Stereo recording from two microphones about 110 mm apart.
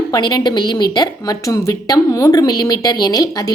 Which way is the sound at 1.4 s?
30° left (ahead or behind).